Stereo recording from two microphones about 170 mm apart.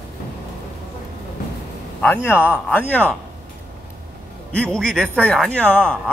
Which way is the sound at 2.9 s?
10° left (ahead or behind).